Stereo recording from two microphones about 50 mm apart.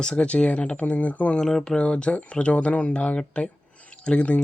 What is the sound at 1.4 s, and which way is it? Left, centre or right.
Speech, centre.